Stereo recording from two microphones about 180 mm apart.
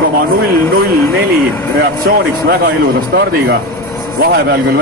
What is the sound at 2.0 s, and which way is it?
Speech, 55° right (ahead or behind).